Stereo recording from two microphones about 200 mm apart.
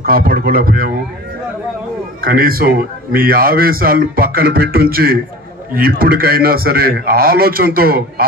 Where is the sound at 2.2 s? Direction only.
45° right (ahead or behind).